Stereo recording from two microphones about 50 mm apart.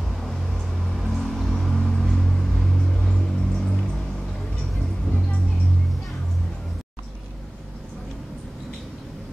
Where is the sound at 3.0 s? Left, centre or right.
Centre.